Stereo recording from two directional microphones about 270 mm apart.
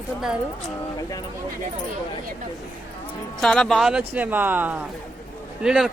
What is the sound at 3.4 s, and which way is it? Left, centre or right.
Speech, centre.